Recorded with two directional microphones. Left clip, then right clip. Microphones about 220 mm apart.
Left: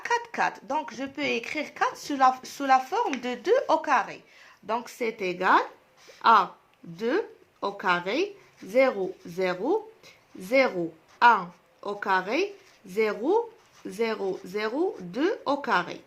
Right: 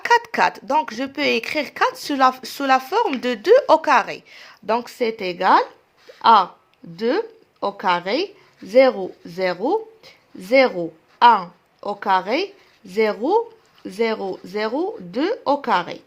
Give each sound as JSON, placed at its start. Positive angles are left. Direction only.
{"t": 0.0, "sound": "speech", "side_deg": -45}